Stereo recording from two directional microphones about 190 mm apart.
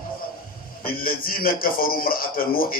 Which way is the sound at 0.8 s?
50° left (ahead or behind).